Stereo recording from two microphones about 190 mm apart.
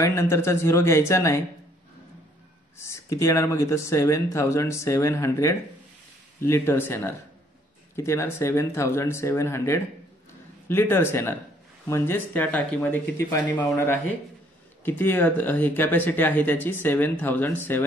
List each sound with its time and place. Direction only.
0.0 s speech: 15° left (ahead or behind)
2.9 s speech: 15° left (ahead or behind)
14.9 s speech: 10° left (ahead or behind)